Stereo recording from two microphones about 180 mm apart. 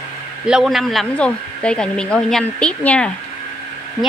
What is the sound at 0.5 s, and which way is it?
Speech, centre (ahead or behind).